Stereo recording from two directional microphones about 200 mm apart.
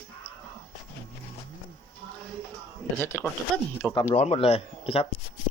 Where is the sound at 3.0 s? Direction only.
10° left (ahead or behind).